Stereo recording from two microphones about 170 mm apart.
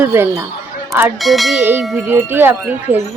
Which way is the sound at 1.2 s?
Centre (ahead or behind).